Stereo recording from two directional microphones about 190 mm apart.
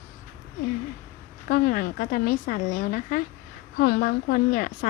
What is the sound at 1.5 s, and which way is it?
A woman's voice, 50° left (ahead or behind).